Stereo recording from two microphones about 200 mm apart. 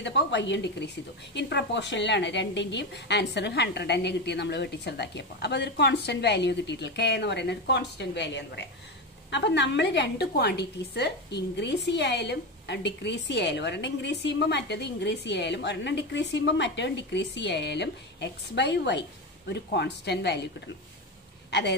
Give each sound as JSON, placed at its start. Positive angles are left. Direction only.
{"t": 0.0, "sound": "a woman's voice", "side_deg": 60}